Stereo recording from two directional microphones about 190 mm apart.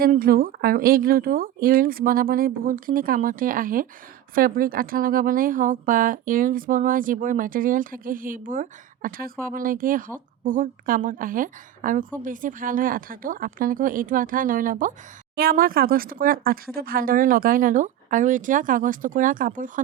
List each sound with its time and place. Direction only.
0.0 s a woman's voice: 50° right (ahead or behind)